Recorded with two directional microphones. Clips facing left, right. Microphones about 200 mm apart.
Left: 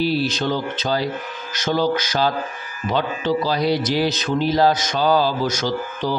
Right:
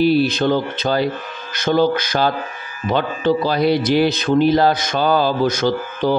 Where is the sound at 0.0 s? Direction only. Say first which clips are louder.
Right 6 dB; 55° right (ahead or behind).